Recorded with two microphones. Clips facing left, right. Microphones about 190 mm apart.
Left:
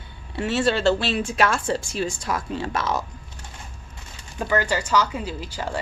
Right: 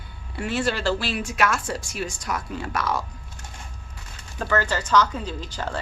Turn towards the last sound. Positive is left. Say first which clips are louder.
# left 1 dB
turn(degrees=10)  # may be behind; listen again after turning